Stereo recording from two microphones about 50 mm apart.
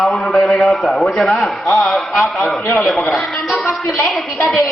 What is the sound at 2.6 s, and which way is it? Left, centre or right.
Speech, left.